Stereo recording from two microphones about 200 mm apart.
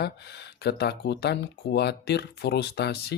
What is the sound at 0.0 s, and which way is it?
Speech, 55° left (ahead or behind).